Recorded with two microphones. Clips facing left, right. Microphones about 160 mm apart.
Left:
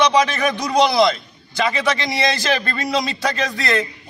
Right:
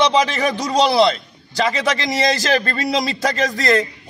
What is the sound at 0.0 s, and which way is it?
A man's voice, 30° right (ahead or behind).